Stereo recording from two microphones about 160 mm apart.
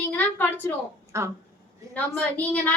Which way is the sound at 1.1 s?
15° right (ahead or behind).